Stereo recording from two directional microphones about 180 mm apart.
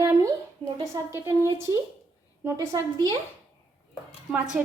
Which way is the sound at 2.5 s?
20° right (ahead or behind).